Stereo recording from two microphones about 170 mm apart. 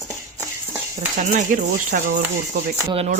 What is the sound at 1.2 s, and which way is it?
Speech, 45° right (ahead or behind).